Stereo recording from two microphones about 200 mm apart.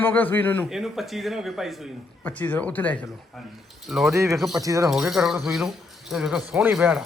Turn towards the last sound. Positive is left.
turn(degrees=-5)  # may be behind; listen again after turning